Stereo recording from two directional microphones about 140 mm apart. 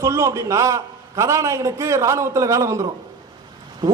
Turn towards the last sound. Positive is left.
turn(degrees=-25)  # may be behind; listen again after turning